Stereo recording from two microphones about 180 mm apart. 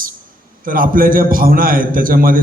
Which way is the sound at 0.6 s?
50° right (ahead or behind).